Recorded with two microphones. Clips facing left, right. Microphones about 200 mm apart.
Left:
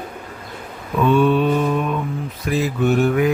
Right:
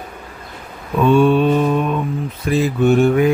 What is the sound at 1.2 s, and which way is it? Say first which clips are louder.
Mantra: right 3 dB; 30° right (ahead or behind).